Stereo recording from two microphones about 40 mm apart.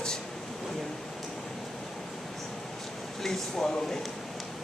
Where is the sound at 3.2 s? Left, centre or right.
Centre.